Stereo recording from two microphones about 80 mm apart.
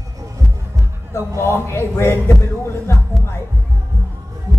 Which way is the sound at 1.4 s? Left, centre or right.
Left.